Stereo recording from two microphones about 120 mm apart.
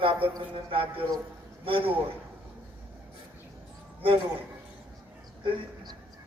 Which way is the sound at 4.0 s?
50° right (ahead or behind).